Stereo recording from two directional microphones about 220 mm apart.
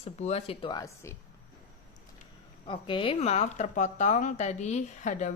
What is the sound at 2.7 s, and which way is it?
A woman's voice, 25° left (ahead or behind).